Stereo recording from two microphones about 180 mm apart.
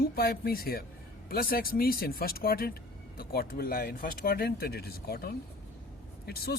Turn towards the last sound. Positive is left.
turn(degrees=65)  # may be behind; listen again after turning